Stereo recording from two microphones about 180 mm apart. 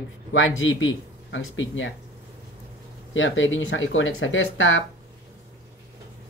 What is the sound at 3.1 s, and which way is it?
Speech, 90° left.